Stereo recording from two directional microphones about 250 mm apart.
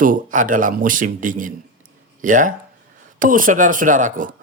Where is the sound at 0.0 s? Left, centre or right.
Right.